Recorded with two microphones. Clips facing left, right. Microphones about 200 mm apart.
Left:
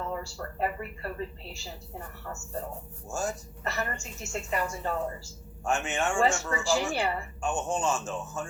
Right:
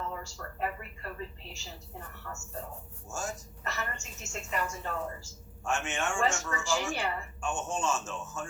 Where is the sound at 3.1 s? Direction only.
35° left (ahead or behind).